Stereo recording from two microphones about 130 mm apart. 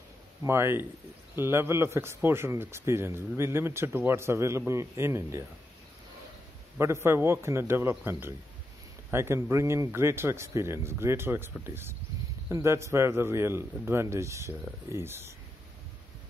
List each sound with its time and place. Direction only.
0.4 s a man's voice: 20° right (ahead or behind)
6.8 s a man's voice: 20° right (ahead or behind)